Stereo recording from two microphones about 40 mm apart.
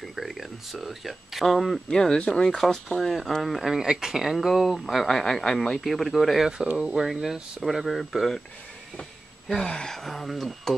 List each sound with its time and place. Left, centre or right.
0.0 s speech: centre
1.9 s speech: centre
2.7 s speech: centre
3.4 s speech: centre
3.7 s speech: centre
9.5 s speech: centre
9.9 s speech: centre